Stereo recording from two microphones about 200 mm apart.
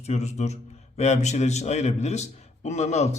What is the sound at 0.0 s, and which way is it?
A man's voice, 35° left (ahead or behind).